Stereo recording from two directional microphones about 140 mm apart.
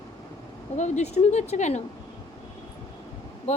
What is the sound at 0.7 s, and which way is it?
Speech, 60° left (ahead or behind).